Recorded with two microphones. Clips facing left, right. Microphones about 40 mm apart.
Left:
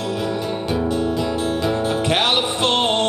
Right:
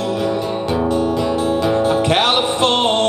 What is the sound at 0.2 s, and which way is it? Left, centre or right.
Music, centre.